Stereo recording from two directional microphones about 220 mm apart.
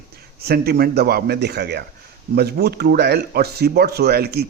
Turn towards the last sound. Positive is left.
turn(degrees=-45)  # may be behind; listen again after turning